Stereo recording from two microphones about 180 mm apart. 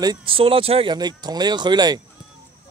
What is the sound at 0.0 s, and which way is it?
Speech, 25° right (ahead or behind).